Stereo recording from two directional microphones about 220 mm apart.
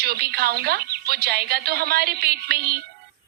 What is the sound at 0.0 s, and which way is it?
Speech, 45° right (ahead or behind).